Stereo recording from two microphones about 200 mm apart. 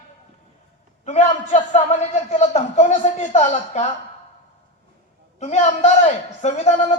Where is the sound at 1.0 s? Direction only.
35° left (ahead or behind).